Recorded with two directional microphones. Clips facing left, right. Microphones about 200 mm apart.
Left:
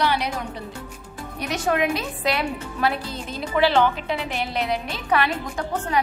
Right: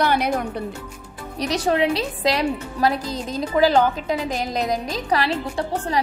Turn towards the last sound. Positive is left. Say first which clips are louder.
# right 1 dB
turn(degrees=-35)  # may be behind; listen again after turning